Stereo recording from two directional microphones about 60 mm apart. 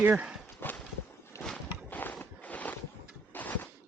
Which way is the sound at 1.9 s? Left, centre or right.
Left.